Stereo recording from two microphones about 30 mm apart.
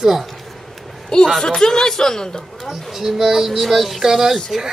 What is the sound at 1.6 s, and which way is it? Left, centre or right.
Speech, centre.